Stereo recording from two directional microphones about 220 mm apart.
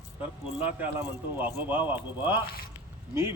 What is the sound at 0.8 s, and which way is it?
Speech, 10° right (ahead or behind).